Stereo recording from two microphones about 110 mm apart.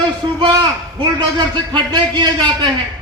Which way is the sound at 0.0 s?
45° right (ahead or behind).